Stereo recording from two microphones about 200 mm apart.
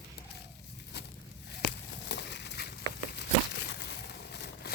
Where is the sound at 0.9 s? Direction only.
55° left (ahead or behind).